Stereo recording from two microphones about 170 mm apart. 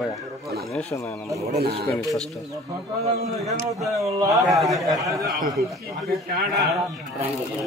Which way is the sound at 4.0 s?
20° right (ahead or behind).